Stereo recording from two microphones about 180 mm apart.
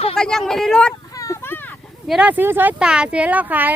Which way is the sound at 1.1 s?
15° left (ahead or behind).